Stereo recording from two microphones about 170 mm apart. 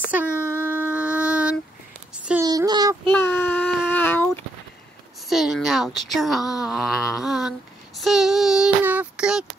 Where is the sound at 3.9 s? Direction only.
10° left (ahead or behind).